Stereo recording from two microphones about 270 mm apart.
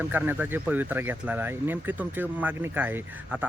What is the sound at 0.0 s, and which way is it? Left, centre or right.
Speech, centre.